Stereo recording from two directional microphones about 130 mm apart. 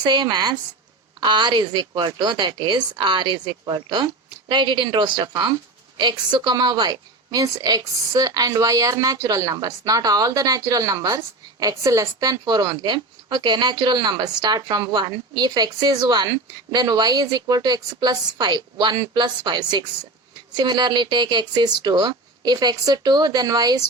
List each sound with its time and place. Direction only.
0.0 s a woman's voice: 35° right (ahead or behind)